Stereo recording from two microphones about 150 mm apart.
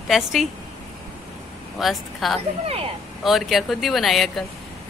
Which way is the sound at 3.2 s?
Centre (ahead or behind).